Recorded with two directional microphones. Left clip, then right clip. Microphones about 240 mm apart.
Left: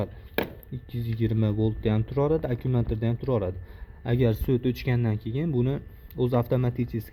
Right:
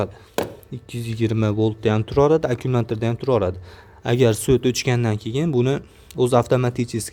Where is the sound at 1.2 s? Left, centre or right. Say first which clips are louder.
Right 7 dB; right.